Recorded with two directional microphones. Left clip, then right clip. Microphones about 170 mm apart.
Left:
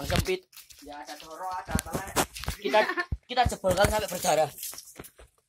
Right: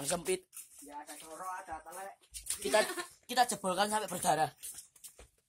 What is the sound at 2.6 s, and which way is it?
Speech, 35° right (ahead or behind).